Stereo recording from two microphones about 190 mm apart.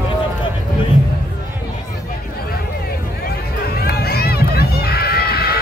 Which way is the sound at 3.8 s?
55° left (ahead or behind).